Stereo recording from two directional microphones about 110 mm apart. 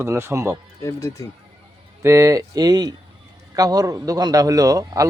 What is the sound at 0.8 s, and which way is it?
Speech, 30° left (ahead or behind).